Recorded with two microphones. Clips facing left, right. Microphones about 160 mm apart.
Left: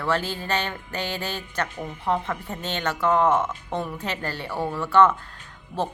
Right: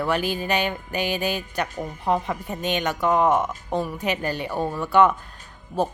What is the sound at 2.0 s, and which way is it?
A woman's voice, 15° right (ahead or behind).